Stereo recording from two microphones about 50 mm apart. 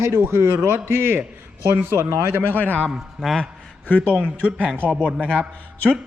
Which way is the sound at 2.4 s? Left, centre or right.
Left.